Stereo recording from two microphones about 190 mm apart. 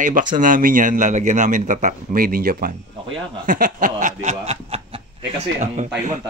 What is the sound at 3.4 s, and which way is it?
Snicker, 45° right (ahead or behind).